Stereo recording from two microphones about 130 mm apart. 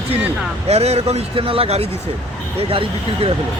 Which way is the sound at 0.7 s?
55° right (ahead or behind).